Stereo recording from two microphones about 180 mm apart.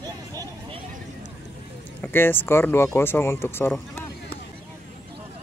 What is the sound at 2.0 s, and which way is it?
Speech, 10° left (ahead or behind).